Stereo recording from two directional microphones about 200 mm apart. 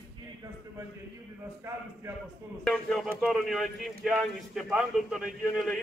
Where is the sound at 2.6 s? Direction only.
Centre (ahead or behind).